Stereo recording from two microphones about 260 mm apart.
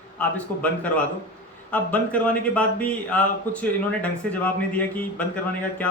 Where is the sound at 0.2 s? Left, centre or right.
Centre.